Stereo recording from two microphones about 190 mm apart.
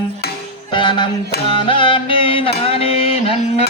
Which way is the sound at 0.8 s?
25° left (ahead or behind).